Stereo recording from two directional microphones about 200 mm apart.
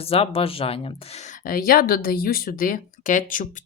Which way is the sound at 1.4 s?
45° left (ahead or behind).